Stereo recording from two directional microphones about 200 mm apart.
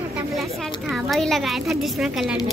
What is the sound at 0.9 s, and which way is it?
Speech, centre (ahead or behind).